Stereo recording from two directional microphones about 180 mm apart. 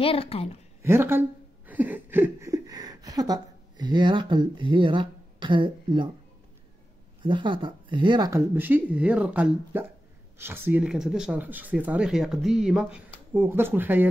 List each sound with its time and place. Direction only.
0.0 s a woman's voice: 30° left (ahead or behind)
0.8 s speech: 15° right (ahead or behind)
7.2 s speech: 25° right (ahead or behind); by 14.0 s 10° right (ahead or behind)